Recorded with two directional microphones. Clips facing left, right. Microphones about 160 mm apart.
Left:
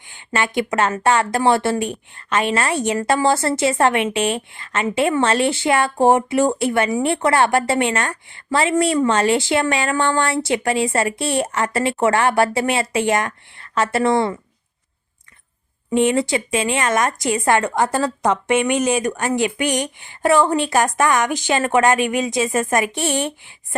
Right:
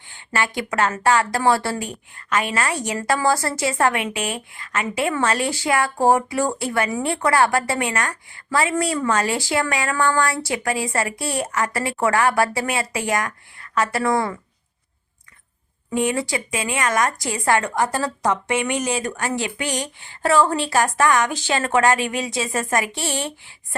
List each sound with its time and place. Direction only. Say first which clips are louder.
0.1 s a woman's voice: left 3 dB; 20° left (ahead or behind)
15.9 s a woman's voice: left 5 dB; 25° left (ahead or behind)